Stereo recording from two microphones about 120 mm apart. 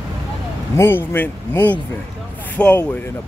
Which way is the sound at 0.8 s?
20° left (ahead or behind).